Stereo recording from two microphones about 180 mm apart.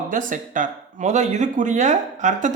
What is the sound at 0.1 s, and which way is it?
Speech, 45° right (ahead or behind).